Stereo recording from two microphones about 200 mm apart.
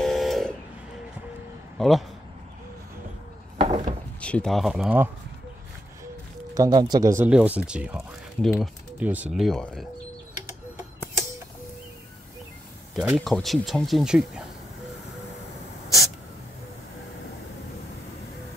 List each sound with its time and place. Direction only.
0.0 s vehicle: centre (ahead or behind)
1.8 s speech: centre (ahead or behind)
3.5 s a sound: 25° right (ahead or behind)
4.2 s speech: 5° left (ahead or behind)
6.5 s speech: 20° right (ahead or behind); by 9.8 s 5° left (ahead or behind)
12.9 s speech: centre (ahead or behind)